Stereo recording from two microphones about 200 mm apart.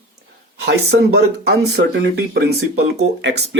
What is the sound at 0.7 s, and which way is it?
Speech, 55° right (ahead or behind).